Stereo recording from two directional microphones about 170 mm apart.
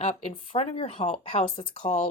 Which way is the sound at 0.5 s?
35° left (ahead or behind).